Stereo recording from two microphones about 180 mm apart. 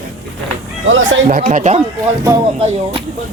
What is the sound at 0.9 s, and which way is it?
Speech, 90° right.